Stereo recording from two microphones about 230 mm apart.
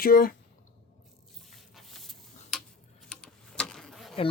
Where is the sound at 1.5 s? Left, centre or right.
Centre.